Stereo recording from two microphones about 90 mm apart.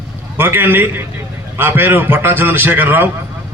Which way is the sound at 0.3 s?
25° right (ahead or behind).